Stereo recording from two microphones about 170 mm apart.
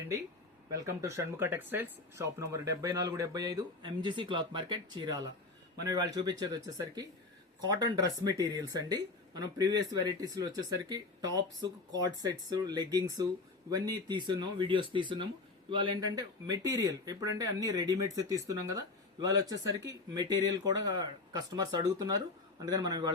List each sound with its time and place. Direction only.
0.7 s speech: 15° right (ahead or behind)